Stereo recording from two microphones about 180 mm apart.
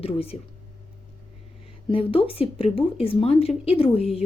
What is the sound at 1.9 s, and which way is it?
A woman's voice, 30° left (ahead or behind).